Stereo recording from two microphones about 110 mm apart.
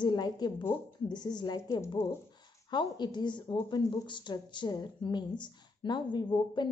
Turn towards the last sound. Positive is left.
turn(degrees=45)  # may be behind; listen again after turning